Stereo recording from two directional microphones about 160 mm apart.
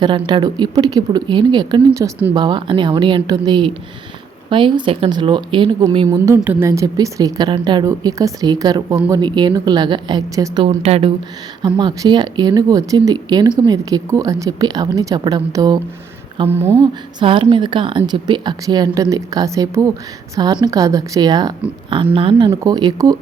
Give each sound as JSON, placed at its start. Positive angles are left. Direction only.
{"t": 0.3, "sound": "a woman's voice", "side_deg": -30}
{"t": 6.1, "sound": "a woman's voice", "side_deg": -20}
{"t": 10.7, "sound": "speech", "side_deg": -40}
{"t": 11.6, "sound": "a woman's voice", "side_deg": -30}
{"t": 16.5, "sound": "speech", "side_deg": -15}
{"t": 16.8, "sound": "a woman's voice", "side_deg": -30}